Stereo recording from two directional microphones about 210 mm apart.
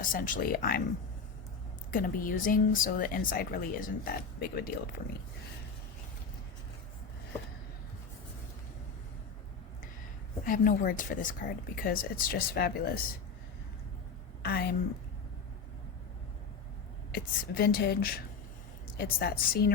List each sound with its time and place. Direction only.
0.0 s speech: 40° left (ahead or behind)
1.9 s speech: 40° left (ahead or behind)
10.4 s speech: 40° left (ahead or behind)
14.4 s speech: 50° left (ahead or behind)
17.1 s speech: 45° left (ahead or behind)